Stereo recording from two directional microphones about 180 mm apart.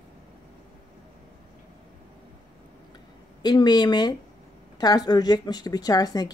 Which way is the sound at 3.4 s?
25° left (ahead or behind).